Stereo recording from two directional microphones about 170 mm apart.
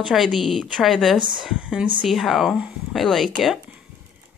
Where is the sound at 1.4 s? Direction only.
5° right (ahead or behind).